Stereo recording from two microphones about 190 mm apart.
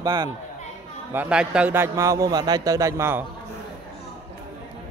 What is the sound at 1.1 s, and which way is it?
A man's voice, 5° right (ahead or behind).